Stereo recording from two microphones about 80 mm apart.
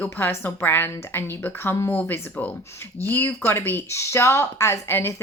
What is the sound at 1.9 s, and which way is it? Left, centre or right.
A woman's voice, left.